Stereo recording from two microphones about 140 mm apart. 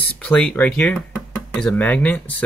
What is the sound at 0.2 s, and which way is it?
Speech, 5° left (ahead or behind).